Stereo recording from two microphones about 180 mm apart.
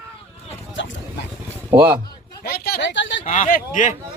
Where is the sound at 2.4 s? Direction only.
55° left (ahead or behind); by 3.2 s 90° left.